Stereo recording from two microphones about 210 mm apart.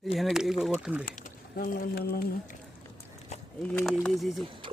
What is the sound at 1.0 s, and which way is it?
Speech, 40° left (ahead or behind).